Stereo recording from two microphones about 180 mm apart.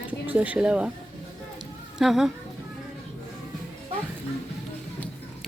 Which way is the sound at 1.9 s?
Centre (ahead or behind).